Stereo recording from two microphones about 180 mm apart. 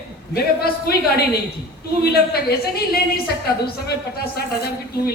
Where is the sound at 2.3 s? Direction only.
60° left (ahead or behind).